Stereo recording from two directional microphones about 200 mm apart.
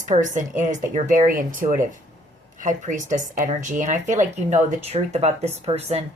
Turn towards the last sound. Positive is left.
turn(degrees=-30)  # may be behind; listen again after turning